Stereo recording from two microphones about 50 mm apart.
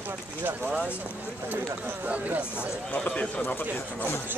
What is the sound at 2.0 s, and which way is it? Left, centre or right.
Speech, right.